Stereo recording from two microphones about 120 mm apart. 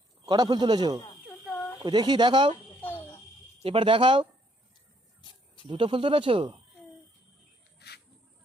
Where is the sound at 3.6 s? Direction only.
45° right (ahead or behind).